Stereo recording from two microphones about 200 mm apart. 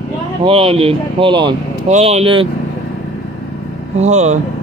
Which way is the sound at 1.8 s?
35° right (ahead or behind).